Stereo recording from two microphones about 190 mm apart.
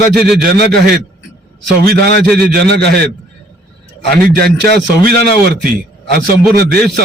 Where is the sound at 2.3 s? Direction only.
55° right (ahead or behind).